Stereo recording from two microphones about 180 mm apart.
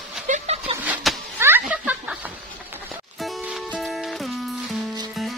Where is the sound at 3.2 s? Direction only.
Centre (ahead or behind).